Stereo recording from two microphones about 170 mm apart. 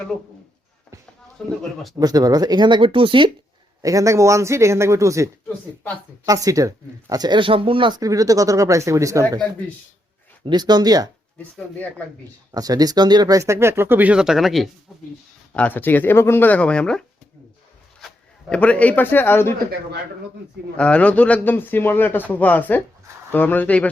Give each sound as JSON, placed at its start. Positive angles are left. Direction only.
{"t": 1.4, "sound": "speech", "side_deg": 5}
{"t": 2.0, "sound": "speech", "side_deg": -20}
{"t": 3.8, "sound": "speech", "side_deg": -20}
{"t": 5.5, "sound": "speech", "side_deg": 10}
{"t": 6.2, "sound": "speech", "side_deg": -20}
{"t": 10.4, "sound": "speech", "side_deg": -25}
{"t": 12.5, "sound": "speech", "side_deg": -20}
{"t": 15.5, "sound": "speech", "side_deg": 10}
{"t": 18.0, "sound": "speech", "side_deg": 5}
{"t": 20.7, "sound": "speech", "side_deg": 5}